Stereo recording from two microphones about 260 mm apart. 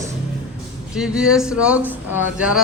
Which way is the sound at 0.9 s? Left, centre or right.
Centre.